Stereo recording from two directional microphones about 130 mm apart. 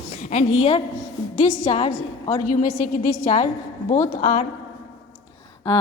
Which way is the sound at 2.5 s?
90° left.